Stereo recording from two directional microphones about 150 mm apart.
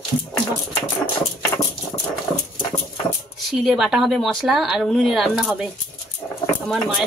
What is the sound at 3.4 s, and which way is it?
Speech, centre (ahead or behind).